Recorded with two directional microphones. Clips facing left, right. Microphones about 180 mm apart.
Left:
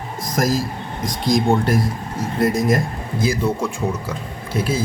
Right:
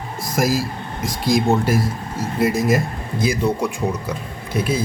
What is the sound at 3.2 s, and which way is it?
Speech, 20° right (ahead or behind).